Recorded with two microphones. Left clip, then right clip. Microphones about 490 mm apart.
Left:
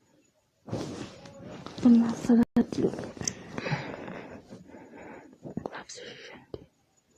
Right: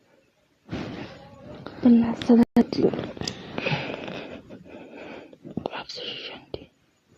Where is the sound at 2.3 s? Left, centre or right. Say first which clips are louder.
Right 6 dB; left.